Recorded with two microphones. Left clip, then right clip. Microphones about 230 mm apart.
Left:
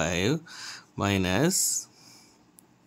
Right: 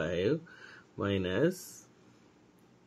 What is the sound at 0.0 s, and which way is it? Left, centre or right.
Speech, left.